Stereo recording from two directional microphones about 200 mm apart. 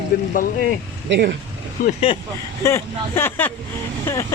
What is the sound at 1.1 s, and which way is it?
Speech, 55° right (ahead or behind).